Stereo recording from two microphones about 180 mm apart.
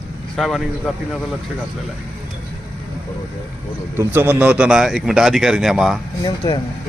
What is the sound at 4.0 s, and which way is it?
Speech, 10° right (ahead or behind).